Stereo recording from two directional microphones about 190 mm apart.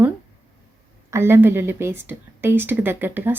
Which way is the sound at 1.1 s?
10° right (ahead or behind).